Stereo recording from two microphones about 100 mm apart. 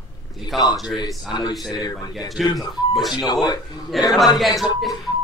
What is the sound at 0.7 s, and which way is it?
Speech, 5° right (ahead or behind).